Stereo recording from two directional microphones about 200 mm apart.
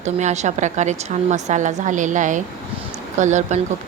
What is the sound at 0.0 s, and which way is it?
A woman's voice, 35° right (ahead or behind).